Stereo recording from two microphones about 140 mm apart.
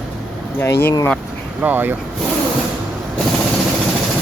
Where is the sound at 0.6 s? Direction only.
15° left (ahead or behind).